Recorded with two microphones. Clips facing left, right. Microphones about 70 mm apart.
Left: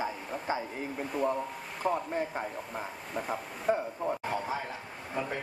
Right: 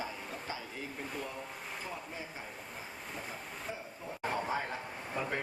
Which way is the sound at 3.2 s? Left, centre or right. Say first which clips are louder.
Left 16 dB; left.